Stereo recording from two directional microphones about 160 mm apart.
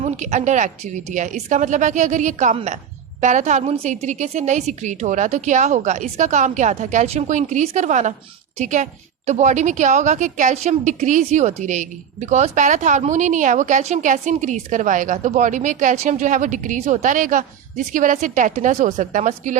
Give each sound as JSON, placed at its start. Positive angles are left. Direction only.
{"t": 0.0, "sound": "a woman's voice", "side_deg": -45}